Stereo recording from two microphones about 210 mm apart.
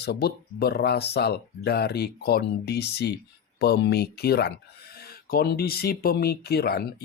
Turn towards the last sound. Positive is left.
turn(degrees=50)  # may be behind; listen again after turning